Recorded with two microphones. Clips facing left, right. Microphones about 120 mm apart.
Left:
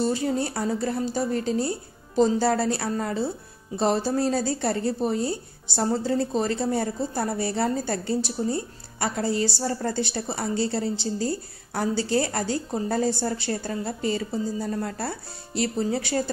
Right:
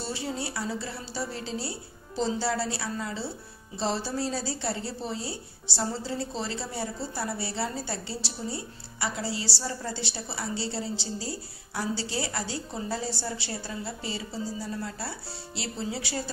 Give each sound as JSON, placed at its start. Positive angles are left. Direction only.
{"t": 0.0, "sound": "a woman's voice", "side_deg": 50}